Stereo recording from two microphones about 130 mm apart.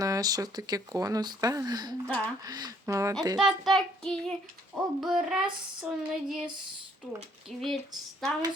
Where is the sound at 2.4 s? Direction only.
30° right (ahead or behind).